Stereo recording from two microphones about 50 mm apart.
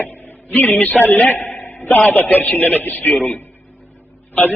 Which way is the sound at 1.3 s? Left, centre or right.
Left.